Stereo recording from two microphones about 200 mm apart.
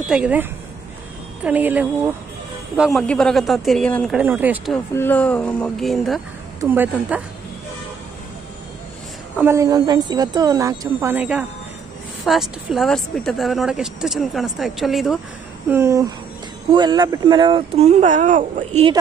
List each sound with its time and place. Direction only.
0.1 s a woman's voice: 5° right (ahead or behind)
4.2 s a woman's voice: 10° right (ahead or behind)
4.9 s a woman's voice: 10° left (ahead or behind); by 7.2 s 10° right (ahead or behind)
9.4 s a woman's voice: 15° right (ahead or behind)
15.7 s a woman's voice: 15° right (ahead or behind); by 18.4 s 40° right (ahead or behind)